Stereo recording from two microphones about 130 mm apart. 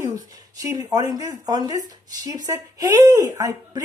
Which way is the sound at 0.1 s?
30° right (ahead or behind).